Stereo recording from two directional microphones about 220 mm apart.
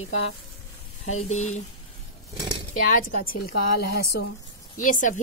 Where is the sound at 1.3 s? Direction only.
30° left (ahead or behind).